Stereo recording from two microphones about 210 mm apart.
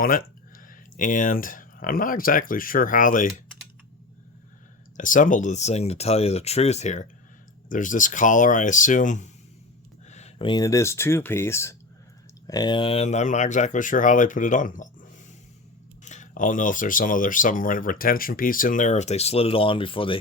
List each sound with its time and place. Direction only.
0.0 s speech: 45° left (ahead or behind)
4.9 s speech: 40° left (ahead or behind)
16.0 s speech: 35° left (ahead or behind)